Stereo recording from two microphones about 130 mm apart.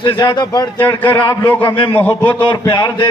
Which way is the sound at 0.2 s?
35° left (ahead or behind).